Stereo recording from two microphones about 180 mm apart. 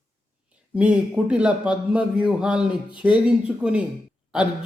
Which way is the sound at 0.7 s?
5° right (ahead or behind).